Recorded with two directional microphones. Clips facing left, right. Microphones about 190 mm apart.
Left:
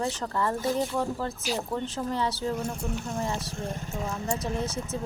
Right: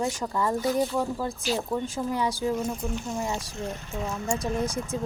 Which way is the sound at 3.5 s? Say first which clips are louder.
Right 1 dB; 50° left (ahead or behind).